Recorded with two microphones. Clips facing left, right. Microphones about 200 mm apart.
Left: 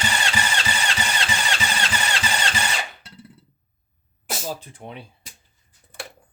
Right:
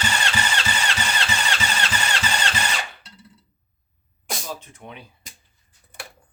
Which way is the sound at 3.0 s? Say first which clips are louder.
Left 4 dB; 55° left (ahead or behind).